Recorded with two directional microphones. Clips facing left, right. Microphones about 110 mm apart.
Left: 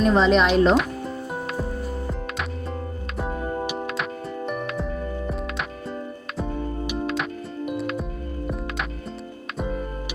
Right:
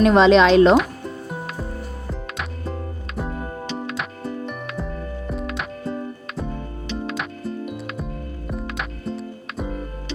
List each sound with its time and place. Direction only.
0.0 s speech: 90° right
0.8 s music: centre (ahead or behind)
3.8 s music: centre (ahead or behind)